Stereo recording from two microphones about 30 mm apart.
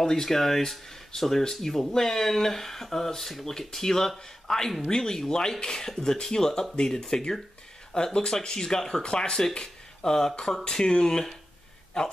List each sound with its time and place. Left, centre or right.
0.0 s speech: centre